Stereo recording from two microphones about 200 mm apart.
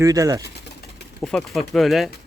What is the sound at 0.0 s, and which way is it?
Speech, 15° right (ahead or behind).